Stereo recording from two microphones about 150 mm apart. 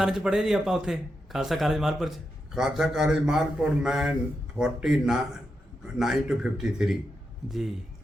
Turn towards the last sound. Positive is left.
turn(degrees=0)  # may be behind; listen again after turning